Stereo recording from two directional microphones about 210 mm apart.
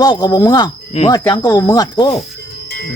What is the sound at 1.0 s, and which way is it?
Speech, 30° left (ahead or behind).